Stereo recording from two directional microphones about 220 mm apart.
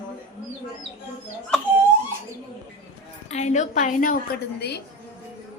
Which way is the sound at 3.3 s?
30° left (ahead or behind).